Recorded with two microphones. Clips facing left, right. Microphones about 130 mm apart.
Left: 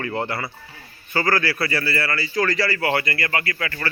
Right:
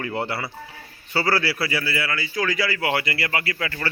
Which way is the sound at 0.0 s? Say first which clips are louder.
Left 1 dB; 15° right (ahead or behind).